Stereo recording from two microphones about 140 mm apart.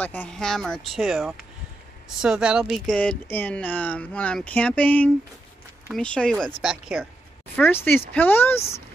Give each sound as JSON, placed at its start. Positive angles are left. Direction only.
{"t": 0.0, "sound": "speech", "side_deg": 10}
{"t": 3.0, "sound": "speech", "side_deg": 10}
{"t": 7.5, "sound": "speech", "side_deg": 15}